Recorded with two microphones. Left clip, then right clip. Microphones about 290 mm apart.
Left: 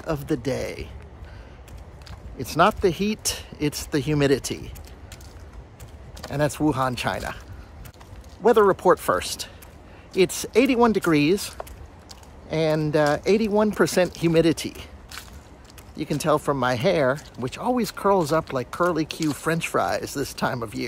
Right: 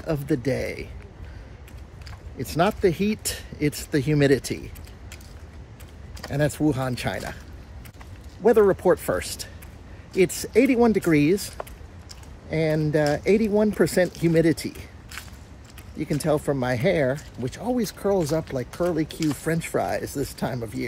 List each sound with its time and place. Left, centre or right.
0.0 s speech: centre
2.3 s speech: centre
6.1 s speech: centre
8.5 s speech: centre
16.3 s speech: centre